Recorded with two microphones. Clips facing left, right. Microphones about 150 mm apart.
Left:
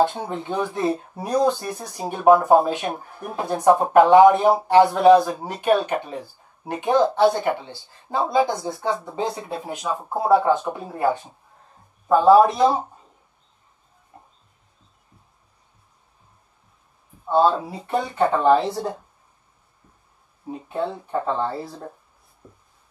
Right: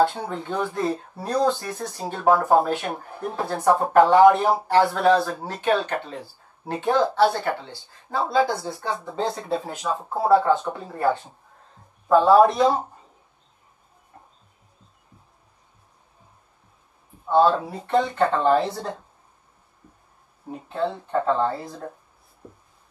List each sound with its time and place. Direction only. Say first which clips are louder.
0.0 s speech: even; 20° left (ahead or behind)
17.3 s speech: even; 10° left (ahead or behind)
20.6 s speech: right 1 dB; 10° left (ahead or behind)
22.4 s writing: right 4 dB; 25° right (ahead or behind)